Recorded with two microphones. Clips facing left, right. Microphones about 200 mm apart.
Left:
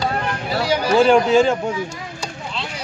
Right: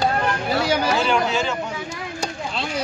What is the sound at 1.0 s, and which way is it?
Speech, 50° left (ahead or behind).